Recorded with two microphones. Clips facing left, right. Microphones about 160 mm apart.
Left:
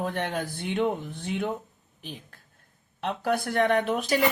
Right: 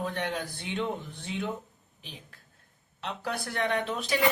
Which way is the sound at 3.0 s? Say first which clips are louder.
Left 7 dB; 50° left (ahead or behind).